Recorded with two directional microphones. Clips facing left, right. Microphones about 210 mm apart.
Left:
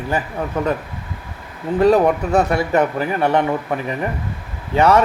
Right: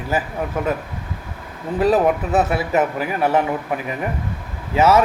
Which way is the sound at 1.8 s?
5° right (ahead or behind).